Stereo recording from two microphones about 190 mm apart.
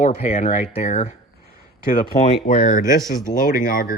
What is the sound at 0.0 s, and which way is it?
Speech, 40° left (ahead or behind).